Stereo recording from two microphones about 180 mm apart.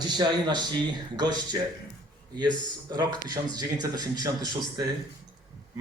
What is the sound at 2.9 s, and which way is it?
A man's voice, 20° right (ahead or behind).